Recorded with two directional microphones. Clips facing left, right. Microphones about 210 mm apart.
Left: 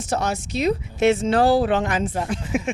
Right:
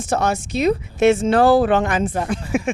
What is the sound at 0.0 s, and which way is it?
Speech, 55° right (ahead or behind).